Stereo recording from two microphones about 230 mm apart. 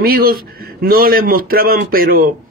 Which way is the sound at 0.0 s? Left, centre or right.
Right.